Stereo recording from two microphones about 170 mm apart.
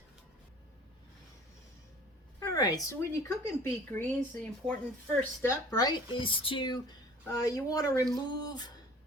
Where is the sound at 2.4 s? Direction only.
20° left (ahead or behind).